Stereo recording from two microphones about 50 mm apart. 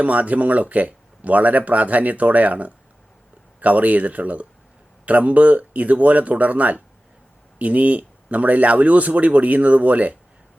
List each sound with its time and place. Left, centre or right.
0.0 s speech: right